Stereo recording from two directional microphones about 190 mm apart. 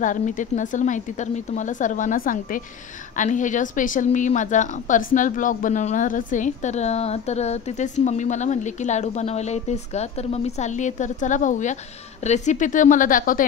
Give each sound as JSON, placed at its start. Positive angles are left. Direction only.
{"t": 0.0, "sound": "a woman's voice", "side_deg": 40}